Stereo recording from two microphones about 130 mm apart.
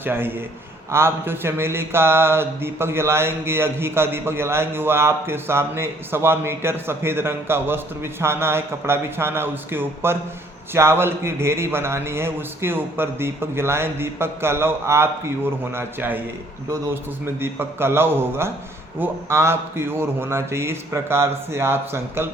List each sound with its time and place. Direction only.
0.0 s a man's voice: 15° right (ahead or behind)
0.9 s mantra: 20° right (ahead or behind)
15.7 s a man's voice: 15° right (ahead or behind)
17.4 s a man's voice: 20° right (ahead or behind)
18.9 s mantra: 20° right (ahead or behind)